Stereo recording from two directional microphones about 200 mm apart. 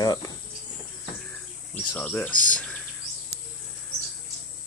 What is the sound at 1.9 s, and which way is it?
Speech, 5° left (ahead or behind).